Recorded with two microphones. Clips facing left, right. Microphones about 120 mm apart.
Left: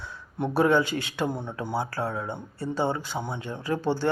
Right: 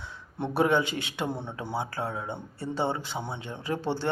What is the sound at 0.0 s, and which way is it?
A man's voice, 25° right (ahead or behind).